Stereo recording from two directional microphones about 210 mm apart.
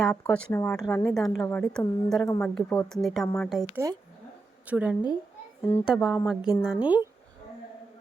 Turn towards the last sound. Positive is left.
turn(degrees=-5)  # may be behind; listen again after turning